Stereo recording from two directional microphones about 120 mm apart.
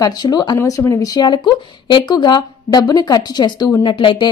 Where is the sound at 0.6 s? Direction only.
25° left (ahead or behind).